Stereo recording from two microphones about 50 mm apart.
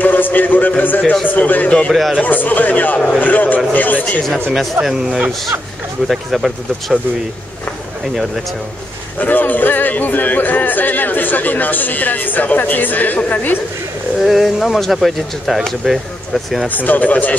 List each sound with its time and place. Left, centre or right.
0.0 s a man's voice: left
1.9 s speech: centre
2.2 s a man's voice: left
4.8 s speech: right
6.0 s speech: centre
9.2 s a man's voice: left
14.2 s speech: centre
16.6 s a man's voice: left